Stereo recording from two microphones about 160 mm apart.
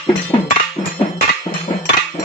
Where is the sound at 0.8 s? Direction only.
20° left (ahead or behind).